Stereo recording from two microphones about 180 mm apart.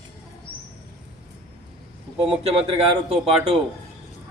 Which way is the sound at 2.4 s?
35° right (ahead or behind).